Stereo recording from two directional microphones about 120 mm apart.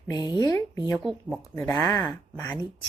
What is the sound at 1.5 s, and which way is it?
Speech, 20° left (ahead or behind).